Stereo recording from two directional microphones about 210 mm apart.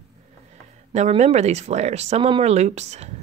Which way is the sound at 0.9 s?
35° right (ahead or behind).